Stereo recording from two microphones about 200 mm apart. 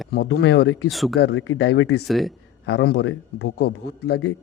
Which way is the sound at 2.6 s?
55° left (ahead or behind).